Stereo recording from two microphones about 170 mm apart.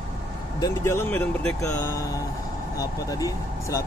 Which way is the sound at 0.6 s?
20° left (ahead or behind).